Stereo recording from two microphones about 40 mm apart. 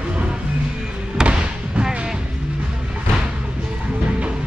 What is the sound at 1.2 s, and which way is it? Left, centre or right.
Basketball bounce, right.